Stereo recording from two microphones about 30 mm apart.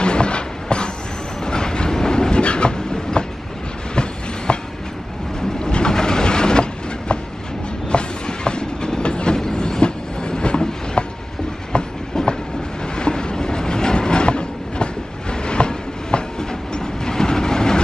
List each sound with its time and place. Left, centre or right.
0.0 s train: left
5.6 s train: left
12.9 s train: left